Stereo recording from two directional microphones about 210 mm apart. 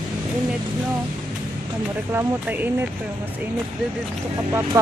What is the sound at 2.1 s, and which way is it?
Speech, 10° right (ahead or behind).